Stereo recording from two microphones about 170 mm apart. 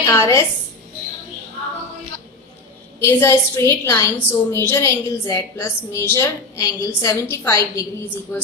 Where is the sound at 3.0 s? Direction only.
15° left (ahead or behind).